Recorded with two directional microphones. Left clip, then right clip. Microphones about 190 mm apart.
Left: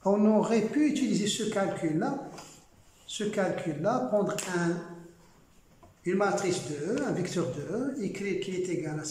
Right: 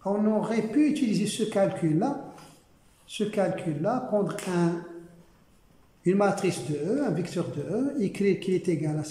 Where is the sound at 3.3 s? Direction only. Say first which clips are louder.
Right 2 dB; 5° right (ahead or behind).